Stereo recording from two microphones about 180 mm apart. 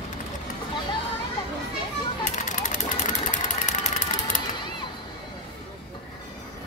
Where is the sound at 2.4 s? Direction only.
45° left (ahead or behind).